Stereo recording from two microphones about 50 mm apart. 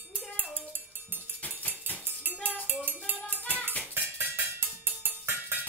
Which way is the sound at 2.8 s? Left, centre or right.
Right.